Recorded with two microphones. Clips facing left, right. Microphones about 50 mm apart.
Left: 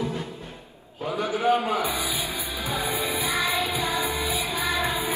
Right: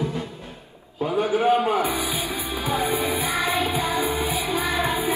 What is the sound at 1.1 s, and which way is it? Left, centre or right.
Music, right.